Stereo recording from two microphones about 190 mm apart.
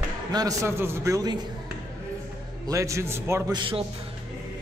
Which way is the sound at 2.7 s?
15° right (ahead or behind).